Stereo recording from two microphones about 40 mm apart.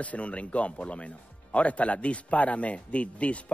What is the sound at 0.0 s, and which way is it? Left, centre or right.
Speech, left.